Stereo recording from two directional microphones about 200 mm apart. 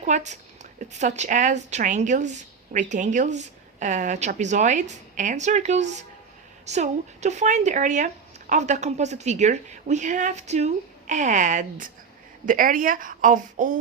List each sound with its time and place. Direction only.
0.0 s a woman's voice: 35° right (ahead or behind)